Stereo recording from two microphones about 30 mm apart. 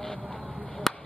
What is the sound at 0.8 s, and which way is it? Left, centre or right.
Chop, centre.